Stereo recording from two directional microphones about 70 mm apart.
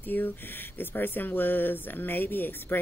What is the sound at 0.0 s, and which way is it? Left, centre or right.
Speech, left.